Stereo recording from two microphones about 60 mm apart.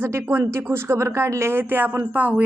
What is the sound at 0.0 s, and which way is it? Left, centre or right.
Speech, right.